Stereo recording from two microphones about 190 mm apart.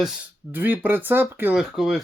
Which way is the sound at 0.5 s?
10° right (ahead or behind).